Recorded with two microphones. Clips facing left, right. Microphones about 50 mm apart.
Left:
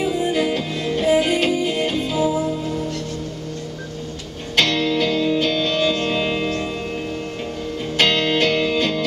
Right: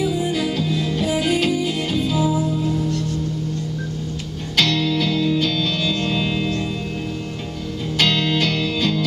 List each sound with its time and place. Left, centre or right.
0.3 s music: centre
4.6 s music: centre
8.0 s music: centre